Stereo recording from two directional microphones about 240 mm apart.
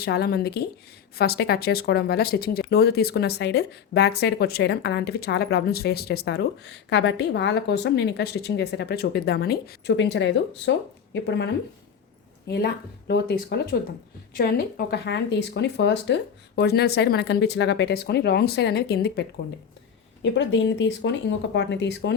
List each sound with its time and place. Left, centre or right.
0.0 s a woman's voice: left
20.3 s a woman's voice: left